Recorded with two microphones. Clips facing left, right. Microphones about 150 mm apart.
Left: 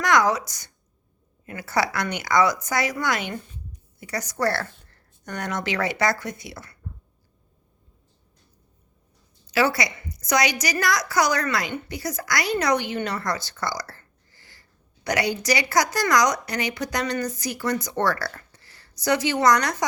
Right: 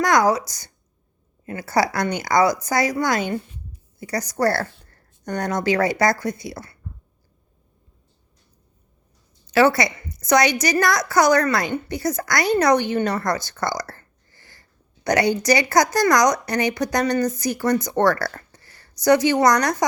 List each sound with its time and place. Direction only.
0.0 s a woman's voice: 35° right (ahead or behind)
9.6 s a woman's voice: 55° right (ahead or behind)
13.5 s a sound: 45° right (ahead or behind)
15.0 s a woman's voice: 50° right (ahead or behind)